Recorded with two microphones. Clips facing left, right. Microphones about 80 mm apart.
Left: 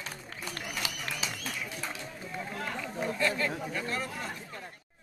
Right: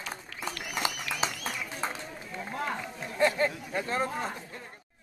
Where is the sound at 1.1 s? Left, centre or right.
Right.